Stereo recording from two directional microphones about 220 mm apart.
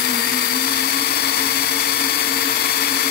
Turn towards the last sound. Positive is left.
turn(degrees=50)  # may be behind; listen again after turning